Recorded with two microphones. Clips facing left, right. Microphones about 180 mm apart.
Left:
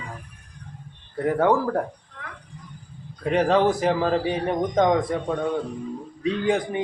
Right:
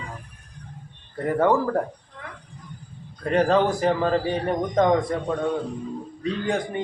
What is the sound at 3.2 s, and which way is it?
A man's voice, centre (ahead or behind).